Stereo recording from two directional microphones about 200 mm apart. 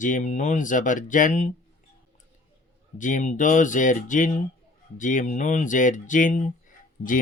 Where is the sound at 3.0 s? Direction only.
40° left (ahead or behind).